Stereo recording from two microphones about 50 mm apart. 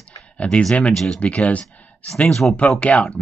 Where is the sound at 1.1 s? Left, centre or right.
Left.